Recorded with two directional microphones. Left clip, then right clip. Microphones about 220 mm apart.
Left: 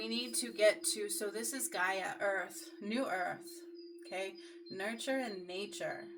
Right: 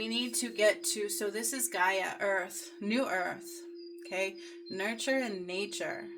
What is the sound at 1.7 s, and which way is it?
Speech, 40° right (ahead or behind).